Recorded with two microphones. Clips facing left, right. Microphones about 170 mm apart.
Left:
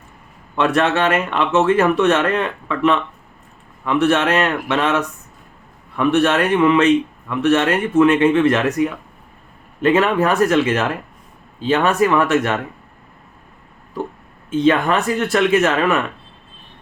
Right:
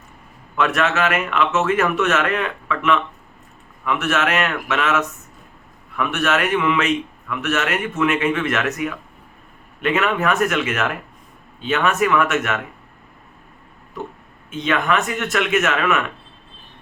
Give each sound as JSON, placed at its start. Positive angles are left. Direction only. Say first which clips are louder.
{"t": 0.5, "sound": "a man's voice", "louder": "left 3 dB", "side_deg": 30}
{"t": 14.5, "sound": "a man's voice", "louder": "left 5 dB", "side_deg": 30}